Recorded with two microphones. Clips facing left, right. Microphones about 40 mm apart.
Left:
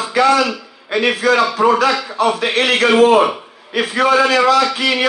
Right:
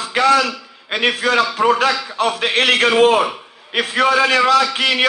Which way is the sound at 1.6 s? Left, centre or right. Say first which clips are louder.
Left 1 dB; right.